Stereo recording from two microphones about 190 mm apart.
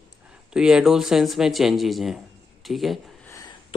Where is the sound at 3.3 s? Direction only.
20° left (ahead or behind).